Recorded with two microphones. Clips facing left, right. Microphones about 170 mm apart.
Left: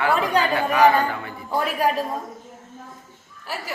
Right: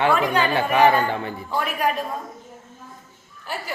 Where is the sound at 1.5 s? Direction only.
35° left (ahead or behind).